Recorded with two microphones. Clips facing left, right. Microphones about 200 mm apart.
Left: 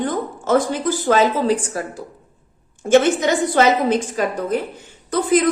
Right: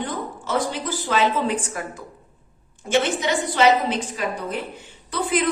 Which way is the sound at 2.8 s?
45° left (ahead or behind).